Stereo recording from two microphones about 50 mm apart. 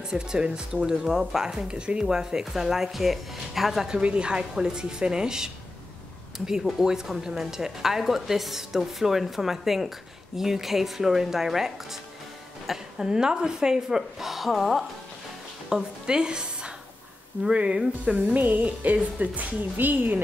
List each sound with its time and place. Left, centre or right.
0.1 s a woman's voice: centre
1.7 s a woman's voice: centre
15.7 s a woman's voice: centre
18.1 s speech: right